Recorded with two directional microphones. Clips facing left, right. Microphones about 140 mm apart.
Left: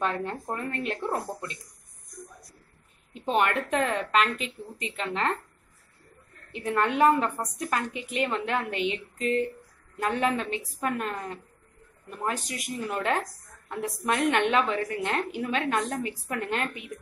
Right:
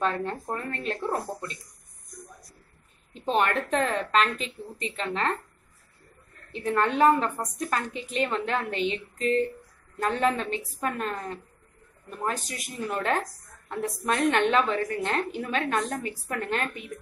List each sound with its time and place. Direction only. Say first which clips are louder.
0.0 s a woman's voice: right 1 dB; 15° left (ahead or behind)
3.1 s a woman's voice: even; 10° left (ahead or behind)
6.5 s a woman's voice: right 1 dB; 15° left (ahead or behind)